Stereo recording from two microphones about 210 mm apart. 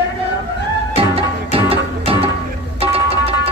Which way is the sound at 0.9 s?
25° right (ahead or behind).